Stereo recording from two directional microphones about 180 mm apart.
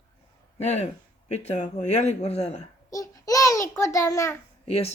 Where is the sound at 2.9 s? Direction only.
20° left (ahead or behind).